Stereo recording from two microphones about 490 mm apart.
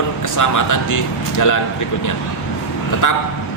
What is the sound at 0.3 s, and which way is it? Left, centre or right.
A man's voice, left.